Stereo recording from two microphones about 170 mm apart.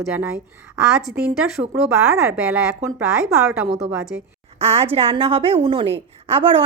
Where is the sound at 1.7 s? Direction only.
15° right (ahead or behind).